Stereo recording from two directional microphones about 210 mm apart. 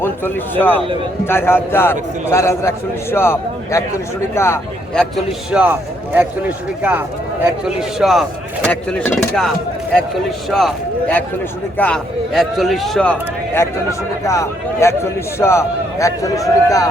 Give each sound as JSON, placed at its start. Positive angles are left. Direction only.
{"t": 0.0, "sound": "a man's voice", "side_deg": 10}
{"t": 4.9, "sound": "a man's voice", "side_deg": 0}